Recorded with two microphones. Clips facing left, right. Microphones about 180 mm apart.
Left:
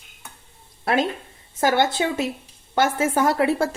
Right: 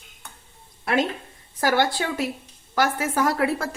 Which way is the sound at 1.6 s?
25° left (ahead or behind).